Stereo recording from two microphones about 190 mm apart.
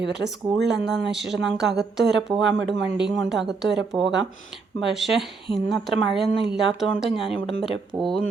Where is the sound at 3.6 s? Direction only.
65° right (ahead or behind).